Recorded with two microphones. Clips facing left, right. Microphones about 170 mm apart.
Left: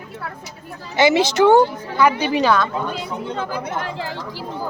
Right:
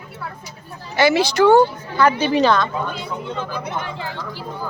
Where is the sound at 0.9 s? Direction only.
20° left (ahead or behind).